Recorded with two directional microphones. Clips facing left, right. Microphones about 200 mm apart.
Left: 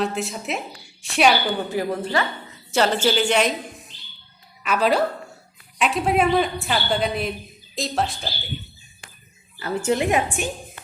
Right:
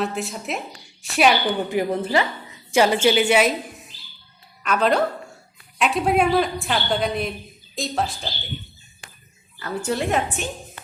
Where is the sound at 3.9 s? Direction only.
5° right (ahead or behind).